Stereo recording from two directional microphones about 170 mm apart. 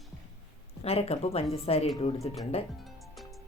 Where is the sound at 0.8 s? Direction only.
35° left (ahead or behind).